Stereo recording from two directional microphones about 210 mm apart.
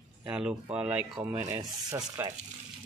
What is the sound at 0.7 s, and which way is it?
Rub, 5° right (ahead or behind).